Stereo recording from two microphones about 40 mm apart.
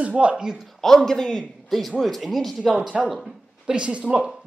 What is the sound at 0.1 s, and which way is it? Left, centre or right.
Speech, right.